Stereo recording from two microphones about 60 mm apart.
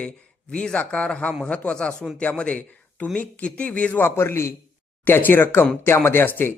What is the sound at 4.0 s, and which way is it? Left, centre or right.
Speech, left.